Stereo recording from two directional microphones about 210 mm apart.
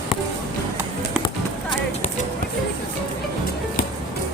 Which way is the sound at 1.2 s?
25° left (ahead or behind).